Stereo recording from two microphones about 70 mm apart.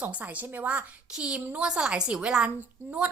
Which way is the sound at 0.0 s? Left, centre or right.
Centre.